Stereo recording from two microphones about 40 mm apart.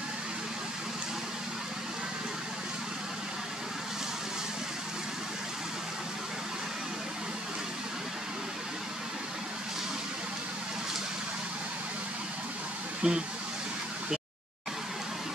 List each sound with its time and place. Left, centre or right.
13.0 s speech: right